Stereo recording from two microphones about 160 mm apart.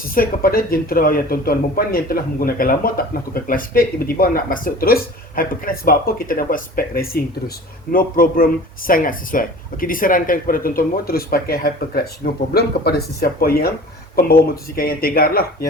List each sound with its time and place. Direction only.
0.1 s speech: 65° left (ahead or behind)